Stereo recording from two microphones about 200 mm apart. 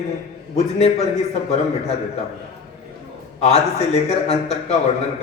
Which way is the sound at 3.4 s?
30° left (ahead or behind).